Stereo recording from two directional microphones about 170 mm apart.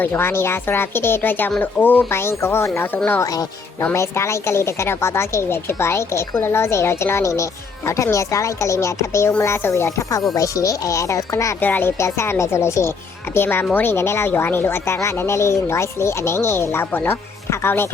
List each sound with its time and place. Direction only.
0.0 s speech: 15° left (ahead or behind)